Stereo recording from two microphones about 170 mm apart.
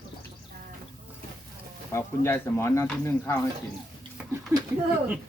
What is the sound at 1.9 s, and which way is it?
Speech, 15° left (ahead or behind).